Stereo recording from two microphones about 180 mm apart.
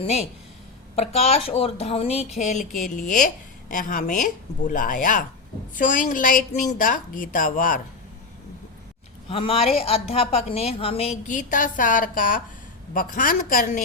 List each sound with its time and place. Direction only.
0.0 s speech: 35° left (ahead or behind)
9.3 s speech: 30° left (ahead or behind)
11.3 s speech: 45° left (ahead or behind)